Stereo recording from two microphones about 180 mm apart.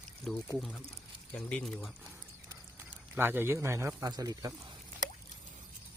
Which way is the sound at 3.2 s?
10° right (ahead or behind).